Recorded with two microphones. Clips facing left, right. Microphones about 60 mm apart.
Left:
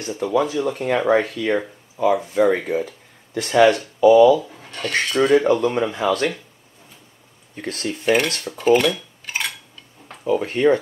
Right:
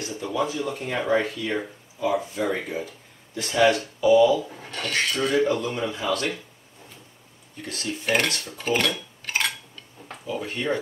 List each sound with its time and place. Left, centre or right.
0.2 s speech: left
4.5 s speech: centre
5.4 s speech: left
7.5 s speech: left
8.0 s speech: centre
9.2 s a sound: centre
10.2 s speech: left